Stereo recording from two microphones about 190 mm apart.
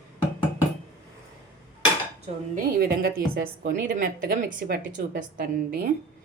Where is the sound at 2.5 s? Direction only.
50° right (ahead or behind).